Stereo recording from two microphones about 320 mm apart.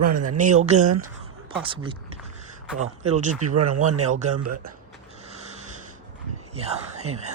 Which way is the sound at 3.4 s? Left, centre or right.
Right.